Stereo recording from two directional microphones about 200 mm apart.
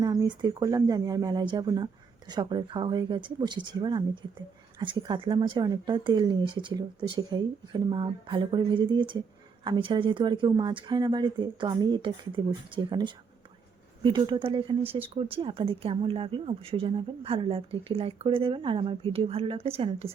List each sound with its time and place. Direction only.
0.0 s speech: 20° right (ahead or behind)